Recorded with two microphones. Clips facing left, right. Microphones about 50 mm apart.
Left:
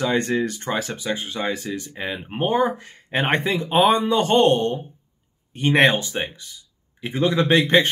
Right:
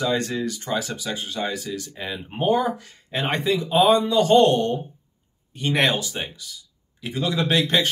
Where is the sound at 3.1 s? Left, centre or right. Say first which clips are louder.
Left 2 dB; left.